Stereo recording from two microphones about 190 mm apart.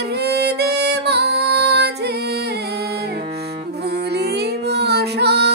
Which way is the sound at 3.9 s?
60° right (ahead or behind).